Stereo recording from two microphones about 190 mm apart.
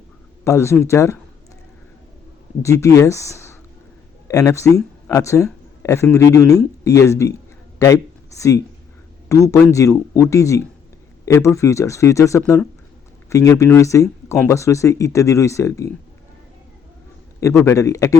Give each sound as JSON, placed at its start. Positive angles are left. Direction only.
{"t": 0.4, "sound": "speech", "side_deg": 15}
{"t": 2.6, "sound": "speech", "side_deg": 15}
{"t": 17.5, "sound": "speech", "side_deg": 10}